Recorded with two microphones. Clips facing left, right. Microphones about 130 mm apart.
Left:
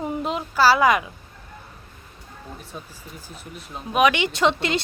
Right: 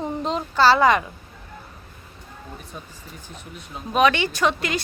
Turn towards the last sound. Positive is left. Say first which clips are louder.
# left 2 dB
turn(degrees=25)  # may be behind; listen again after turning